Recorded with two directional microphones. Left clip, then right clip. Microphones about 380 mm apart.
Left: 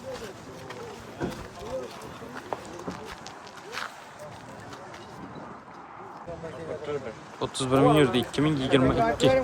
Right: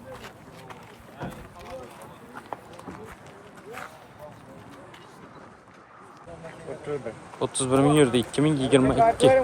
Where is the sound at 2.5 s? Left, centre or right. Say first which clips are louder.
Left 3 dB; centre.